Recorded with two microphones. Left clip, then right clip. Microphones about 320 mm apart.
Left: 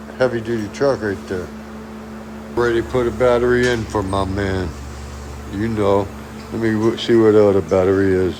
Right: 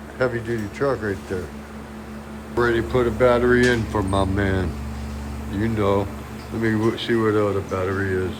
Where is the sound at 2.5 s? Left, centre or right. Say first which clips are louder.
Left 2 dB; centre.